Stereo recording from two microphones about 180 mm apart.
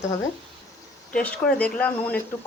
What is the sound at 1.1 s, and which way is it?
Speech, 5° left (ahead or behind).